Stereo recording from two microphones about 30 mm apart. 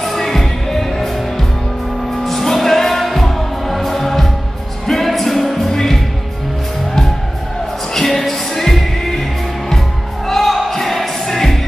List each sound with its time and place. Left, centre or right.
0.0 s music: centre
2.2 s music: centre
5.7 s music: centre
7.9 s music: centre
10.2 s music: centre